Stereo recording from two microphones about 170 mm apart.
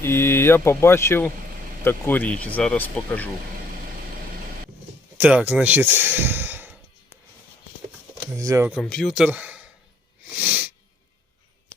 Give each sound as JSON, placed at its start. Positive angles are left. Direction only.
{"t": 0.0, "sound": "speech", "side_deg": 15}
{"t": 5.1, "sound": "speech", "side_deg": -10}
{"t": 8.3, "sound": "speech", "side_deg": -20}
{"t": 8.7, "sound": "speech", "side_deg": 5}
{"t": 10.2, "sound": "sneeze", "side_deg": -10}